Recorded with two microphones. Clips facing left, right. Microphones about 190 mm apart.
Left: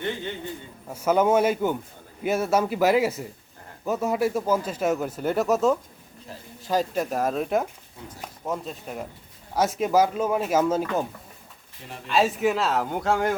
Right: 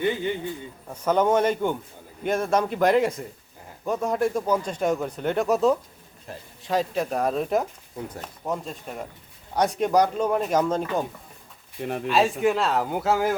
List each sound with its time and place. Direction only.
0.9 s a man's voice: 10° left (ahead or behind)
11.8 s speech: 60° right (ahead or behind)
12.0 s speech: centre (ahead or behind)